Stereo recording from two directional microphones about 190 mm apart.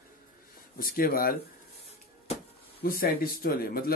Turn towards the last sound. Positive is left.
turn(degrees=50)  # may be behind; listen again after turning